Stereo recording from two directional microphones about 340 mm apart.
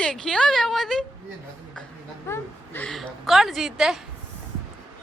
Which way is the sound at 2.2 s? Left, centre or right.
Centre.